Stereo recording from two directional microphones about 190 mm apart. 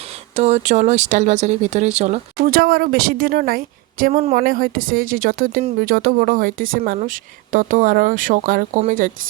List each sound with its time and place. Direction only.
0.3 s speech: 35° right (ahead or behind)
2.4 s a woman's voice: 50° right (ahead or behind)